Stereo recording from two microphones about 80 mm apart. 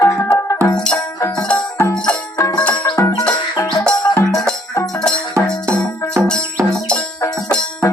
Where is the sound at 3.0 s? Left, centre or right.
Left.